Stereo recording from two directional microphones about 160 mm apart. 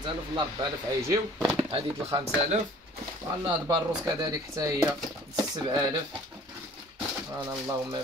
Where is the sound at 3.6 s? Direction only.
20° right (ahead or behind).